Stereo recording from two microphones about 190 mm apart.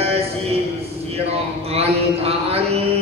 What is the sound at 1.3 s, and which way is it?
Mantra, 30° right (ahead or behind).